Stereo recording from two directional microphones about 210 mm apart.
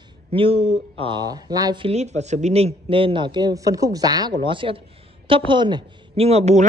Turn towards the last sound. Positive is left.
turn(degrees=-30)  # may be behind; listen again after turning